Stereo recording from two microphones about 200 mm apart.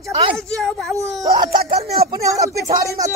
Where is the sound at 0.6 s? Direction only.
Centre (ahead or behind).